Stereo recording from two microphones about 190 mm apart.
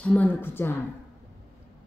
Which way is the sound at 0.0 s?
5° left (ahead or behind).